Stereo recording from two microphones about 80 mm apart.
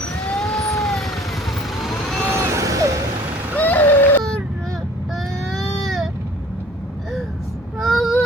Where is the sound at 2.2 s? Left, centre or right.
Right.